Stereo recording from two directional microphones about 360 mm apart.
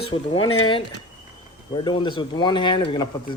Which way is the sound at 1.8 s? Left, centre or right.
Centre.